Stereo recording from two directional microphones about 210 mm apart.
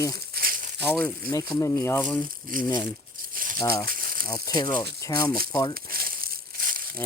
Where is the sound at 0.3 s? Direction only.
45° right (ahead or behind).